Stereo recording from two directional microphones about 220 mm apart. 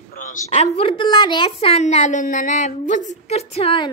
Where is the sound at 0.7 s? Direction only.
25° left (ahead or behind).